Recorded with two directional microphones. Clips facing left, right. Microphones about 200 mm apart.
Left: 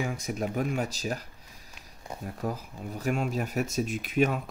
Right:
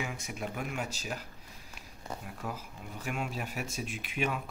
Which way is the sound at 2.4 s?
40° left (ahead or behind).